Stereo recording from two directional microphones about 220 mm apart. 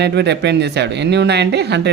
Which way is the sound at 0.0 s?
50° right (ahead or behind).